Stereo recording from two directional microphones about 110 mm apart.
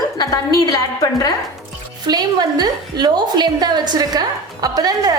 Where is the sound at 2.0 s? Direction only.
40° right (ahead or behind).